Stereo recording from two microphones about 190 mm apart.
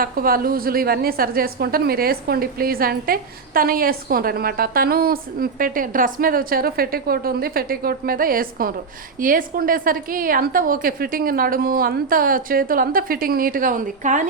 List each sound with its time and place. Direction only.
0.0 s a woman's voice: 50° right (ahead or behind)